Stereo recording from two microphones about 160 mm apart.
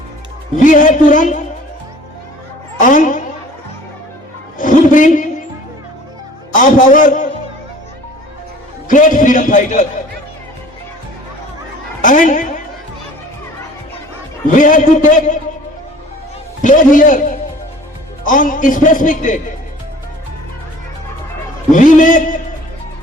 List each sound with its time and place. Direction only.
0.5 s a man's voice: 55° left (ahead or behind)
2.8 s speech: 55° left (ahead or behind)
4.5 s a sound: 55° left (ahead or behind)
6.5 s a sound: 55° left (ahead or behind)
8.9 s a sound: 55° left (ahead or behind)
12.0 s a woman's voice: 55° left (ahead or behind)
14.5 s a man's voice: 55° left (ahead or behind)
16.6 s a man's voice: 55° left (ahead or behind)
18.3 s a man's voice: 55° left (ahead or behind)
21.7 s a man's voice: 55° left (ahead or behind)